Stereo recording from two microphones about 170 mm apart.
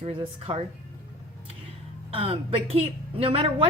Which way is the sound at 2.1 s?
35° right (ahead or behind).